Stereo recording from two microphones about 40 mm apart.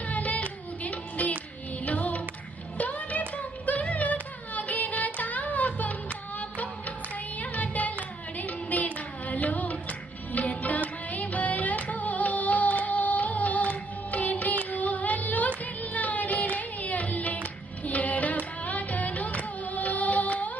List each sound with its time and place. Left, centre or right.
0.0 s music: left
2.8 s a sound: left
7.3 s singing: left
8.4 s music: left